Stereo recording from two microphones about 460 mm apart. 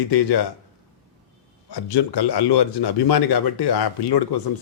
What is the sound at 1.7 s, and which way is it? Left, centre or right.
Speech, left.